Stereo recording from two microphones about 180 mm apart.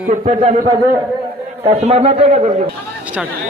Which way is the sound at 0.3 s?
40° right (ahead or behind).